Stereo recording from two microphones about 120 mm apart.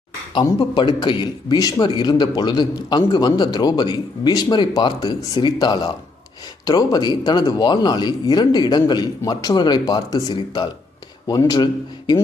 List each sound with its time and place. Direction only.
0.3 s a man's voice: 40° left (ahead or behind)